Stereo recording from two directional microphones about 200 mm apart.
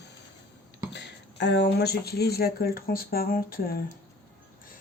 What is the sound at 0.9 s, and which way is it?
Speech, 60° left (ahead or behind).